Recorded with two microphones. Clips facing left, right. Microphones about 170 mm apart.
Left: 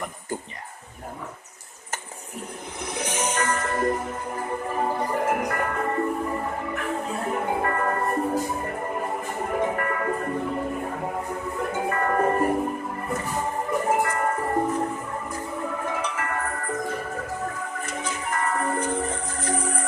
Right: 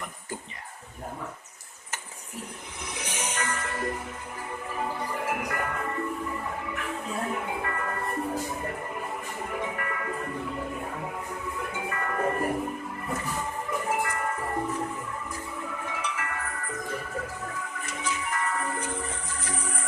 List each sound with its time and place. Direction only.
2.8 s music: 40° left (ahead or behind)
13.7 s music: 45° left (ahead or behind)